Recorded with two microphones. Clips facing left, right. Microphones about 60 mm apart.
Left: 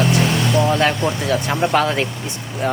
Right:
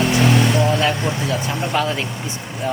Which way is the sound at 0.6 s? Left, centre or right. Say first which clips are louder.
Left 2 dB; left.